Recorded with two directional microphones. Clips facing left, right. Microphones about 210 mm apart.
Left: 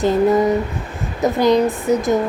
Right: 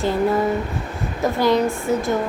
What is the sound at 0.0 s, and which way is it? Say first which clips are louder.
A woman's voice: left 4 dB; 20° left (ahead or behind).